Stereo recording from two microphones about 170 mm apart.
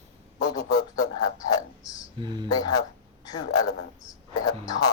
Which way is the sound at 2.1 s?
25° right (ahead or behind).